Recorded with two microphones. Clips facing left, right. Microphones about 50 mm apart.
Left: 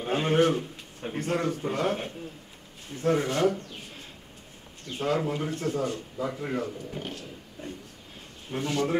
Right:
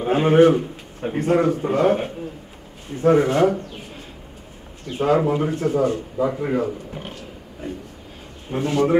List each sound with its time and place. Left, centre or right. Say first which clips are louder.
0.0 s a man's voice: right 9 dB; centre
3.4 s speech: right 6 dB; centre
8.5 s speech: right 8 dB; centre